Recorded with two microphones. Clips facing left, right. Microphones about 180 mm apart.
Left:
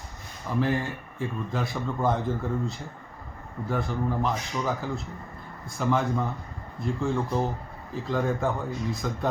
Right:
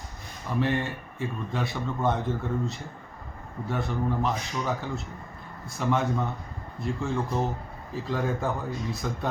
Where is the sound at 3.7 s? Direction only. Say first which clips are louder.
Even; centre (ahead or behind).